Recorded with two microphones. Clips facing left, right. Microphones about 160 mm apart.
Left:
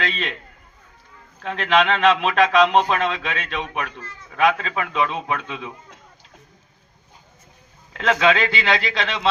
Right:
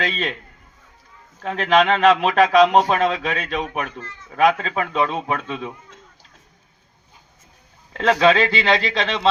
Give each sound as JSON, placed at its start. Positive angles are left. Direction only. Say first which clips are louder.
{"t": 0.0, "sound": "a man's voice", "louder": "right 2 dB", "side_deg": -40}
{"t": 1.4, "sound": "a man's voice", "louder": "right 2 dB", "side_deg": -40}
{"t": 7.9, "sound": "a man's voice", "louder": "right 3 dB", "side_deg": -35}